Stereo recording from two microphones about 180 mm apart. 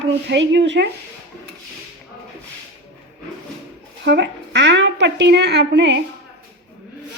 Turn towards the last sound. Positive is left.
turn(degrees=-70)  # may be behind; listen again after turning